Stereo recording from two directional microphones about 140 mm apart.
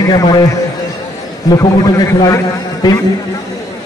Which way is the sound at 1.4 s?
30° left (ahead or behind).